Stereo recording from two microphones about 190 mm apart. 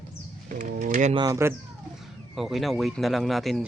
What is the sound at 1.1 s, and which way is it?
Speech, 20° right (ahead or behind).